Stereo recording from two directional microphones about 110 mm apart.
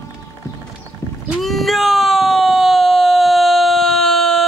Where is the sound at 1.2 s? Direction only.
Centre (ahead or behind).